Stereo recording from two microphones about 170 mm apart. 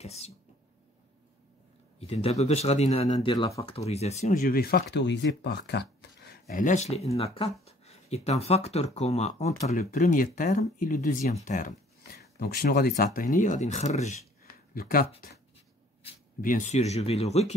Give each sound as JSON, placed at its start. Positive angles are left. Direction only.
{"t": 0.0, "sound": "speech", "side_deg": 40}
{"t": 2.0, "sound": "speech", "side_deg": 35}
{"t": 3.6, "sound": "speech", "side_deg": 35}
{"t": 4.9, "sound": "speech", "side_deg": 90}
{"t": 6.5, "sound": "speech", "side_deg": 45}
{"t": 9.7, "sound": "speech", "side_deg": 50}
{"t": 12.9, "sound": "speech", "side_deg": 55}
{"t": 14.7, "sound": "speech", "side_deg": 60}
{"t": 16.3, "sound": "speech", "side_deg": 50}